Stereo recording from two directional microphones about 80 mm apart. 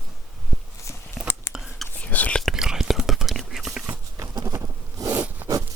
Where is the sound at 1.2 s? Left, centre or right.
Centre.